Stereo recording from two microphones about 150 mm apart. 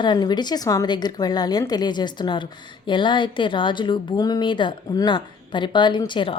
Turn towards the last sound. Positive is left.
turn(degrees=35)  # may be behind; listen again after turning